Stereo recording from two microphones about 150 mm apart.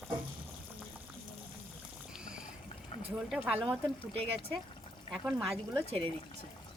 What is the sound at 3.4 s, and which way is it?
Speech, 5° right (ahead or behind).